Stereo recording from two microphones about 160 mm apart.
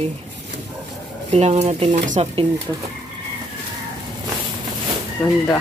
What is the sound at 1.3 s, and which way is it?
Speech, 45° right (ahead or behind).